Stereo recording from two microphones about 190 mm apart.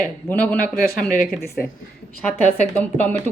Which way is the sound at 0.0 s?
10° left (ahead or behind).